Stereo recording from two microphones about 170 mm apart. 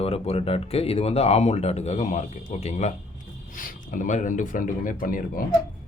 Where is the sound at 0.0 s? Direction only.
35° left (ahead or behind); by 5.5 s 55° left (ahead or behind).